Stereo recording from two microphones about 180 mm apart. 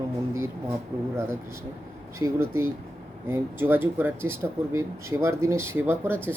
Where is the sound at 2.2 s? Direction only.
15° right (ahead or behind).